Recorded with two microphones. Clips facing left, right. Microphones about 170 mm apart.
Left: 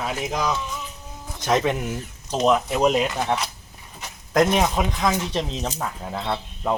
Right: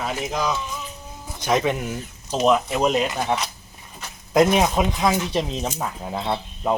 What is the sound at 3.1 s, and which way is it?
Speech, 10° right (ahead or behind).